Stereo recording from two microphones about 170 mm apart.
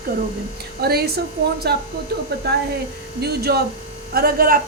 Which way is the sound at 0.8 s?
65° right (ahead or behind).